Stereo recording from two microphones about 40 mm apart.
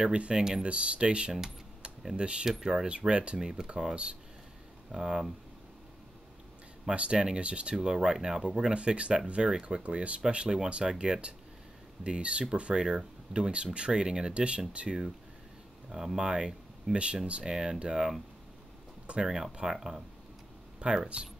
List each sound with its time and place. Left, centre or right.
0.0 s speech: right
0.4 s speech: centre
0.7 s speech: right
3.1 s speech: right
3.3 s speech: centre
4.9 s speech: centre
6.9 s speech: right
9.8 s speech: right
15.9 s speech: centre
19.2 s speech: centre